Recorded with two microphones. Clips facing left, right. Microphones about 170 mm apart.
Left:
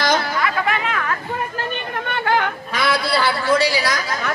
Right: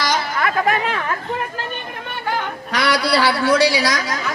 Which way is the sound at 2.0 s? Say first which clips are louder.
Left 4 dB; 75° left (ahead or behind).